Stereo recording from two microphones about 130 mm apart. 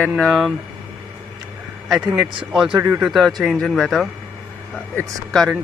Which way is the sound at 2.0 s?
30° right (ahead or behind).